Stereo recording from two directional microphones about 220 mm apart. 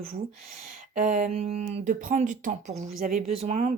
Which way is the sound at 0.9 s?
35° right (ahead or behind).